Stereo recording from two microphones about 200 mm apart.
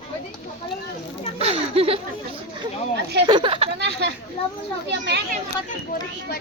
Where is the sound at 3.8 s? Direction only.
60° right (ahead or behind).